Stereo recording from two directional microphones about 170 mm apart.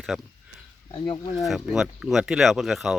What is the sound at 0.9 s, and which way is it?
Speech, 25° left (ahead or behind).